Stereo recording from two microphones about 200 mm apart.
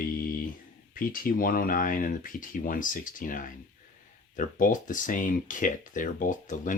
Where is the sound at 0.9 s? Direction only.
45° left (ahead or behind).